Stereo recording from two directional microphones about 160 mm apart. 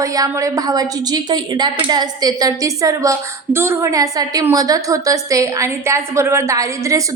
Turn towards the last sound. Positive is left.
turn(degrees=-20)  # may be behind; listen again after turning